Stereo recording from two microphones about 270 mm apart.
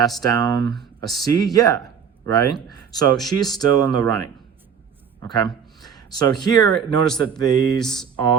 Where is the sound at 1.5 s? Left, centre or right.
Centre.